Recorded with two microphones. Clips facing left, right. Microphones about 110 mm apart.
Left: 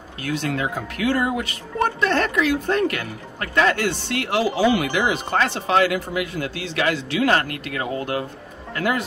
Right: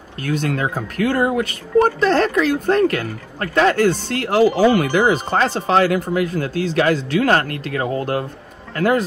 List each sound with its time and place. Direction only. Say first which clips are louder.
0.2 s speech: right 3 dB; 50° right (ahead or behind)